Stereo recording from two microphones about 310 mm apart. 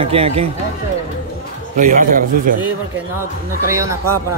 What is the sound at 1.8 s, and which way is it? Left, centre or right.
Speech, right.